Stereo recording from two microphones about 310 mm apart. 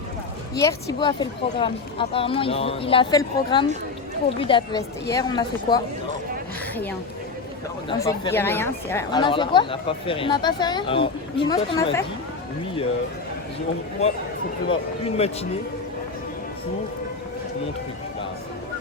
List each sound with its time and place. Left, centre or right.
0.6 s a woman's voice: centre
7.9 s a woman's voice: centre
14.7 s speech: centre